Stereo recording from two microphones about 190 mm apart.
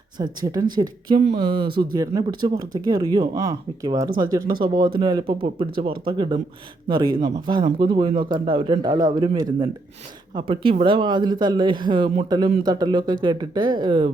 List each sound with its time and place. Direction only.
0.2 s a man's voice: 20° right (ahead or behind)